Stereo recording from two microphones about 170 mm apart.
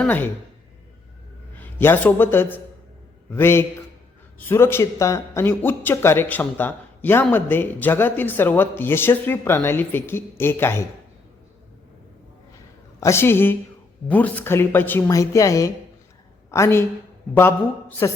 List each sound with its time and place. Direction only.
0.0 s speech: 10° left (ahead or behind)
1.5 s a man's voice: 10° left (ahead or behind)
13.0 s a woman's voice: 15° left (ahead or behind)